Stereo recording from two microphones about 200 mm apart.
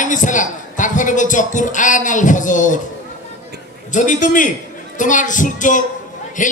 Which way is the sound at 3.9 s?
40° left (ahead or behind).